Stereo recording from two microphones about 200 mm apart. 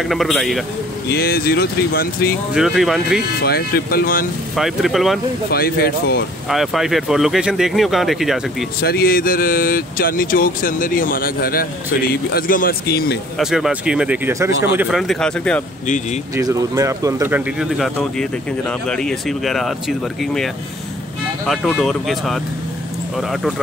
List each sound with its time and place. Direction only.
0.0 s speech: centre (ahead or behind)
1.1 s speech: 50° left (ahead or behind)
2.5 s speech: centre (ahead or behind)
3.4 s speech: 50° left (ahead or behind)
4.6 s speech: centre (ahead or behind)
5.5 s speech: 50° left (ahead or behind)
6.5 s speech: centre (ahead or behind)
8.8 s speech: 50° left (ahead or behind)
13.4 s speech: centre (ahead or behind)
16.3 s speech: 15° right (ahead or behind); by 20.4 s centre (ahead or behind)
21.5 s speech: centre (ahead or behind)